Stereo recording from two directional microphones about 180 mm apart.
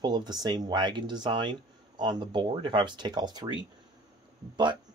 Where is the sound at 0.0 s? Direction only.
25° right (ahead or behind).